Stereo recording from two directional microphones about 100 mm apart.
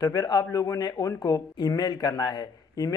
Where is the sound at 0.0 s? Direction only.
45° left (ahead or behind).